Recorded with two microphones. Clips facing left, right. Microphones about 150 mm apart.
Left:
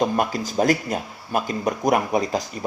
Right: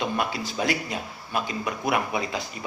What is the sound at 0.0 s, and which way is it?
Speech, 45° left (ahead or behind).